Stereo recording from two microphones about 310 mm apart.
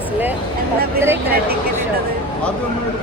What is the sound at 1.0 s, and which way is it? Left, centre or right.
Speech, centre.